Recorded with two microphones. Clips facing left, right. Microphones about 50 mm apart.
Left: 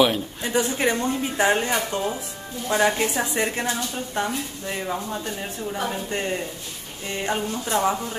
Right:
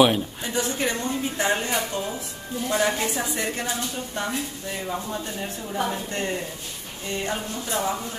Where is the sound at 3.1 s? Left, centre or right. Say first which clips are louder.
Left 3 dB; left.